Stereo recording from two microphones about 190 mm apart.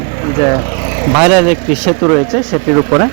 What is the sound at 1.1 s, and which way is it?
Speech, 5° right (ahead or behind).